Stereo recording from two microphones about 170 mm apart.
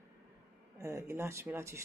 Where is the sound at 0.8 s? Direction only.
15° right (ahead or behind).